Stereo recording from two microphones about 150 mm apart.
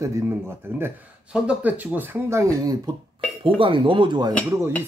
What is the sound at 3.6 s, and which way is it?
Speech, 35° right (ahead or behind).